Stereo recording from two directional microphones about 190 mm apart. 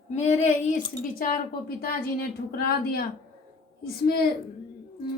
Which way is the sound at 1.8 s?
50° left (ahead or behind).